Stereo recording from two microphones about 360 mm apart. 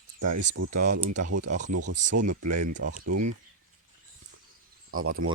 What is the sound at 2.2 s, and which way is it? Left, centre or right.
Speech, right.